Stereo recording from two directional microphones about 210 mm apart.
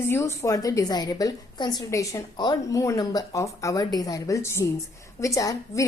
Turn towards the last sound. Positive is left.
turn(degrees=15)  # may be behind; listen again after turning